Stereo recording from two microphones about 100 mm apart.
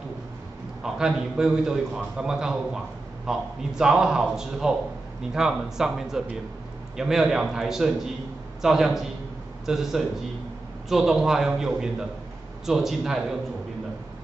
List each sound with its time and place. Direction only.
0.8 s a man's voice: 5° right (ahead or behind)